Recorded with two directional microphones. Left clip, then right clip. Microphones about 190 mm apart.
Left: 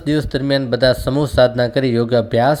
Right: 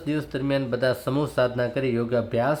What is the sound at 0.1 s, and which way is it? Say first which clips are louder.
Speech: left 8 dB; 25° left (ahead or behind).